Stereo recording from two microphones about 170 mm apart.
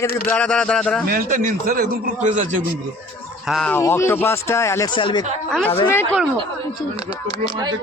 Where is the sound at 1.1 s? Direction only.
55° right (ahead or behind).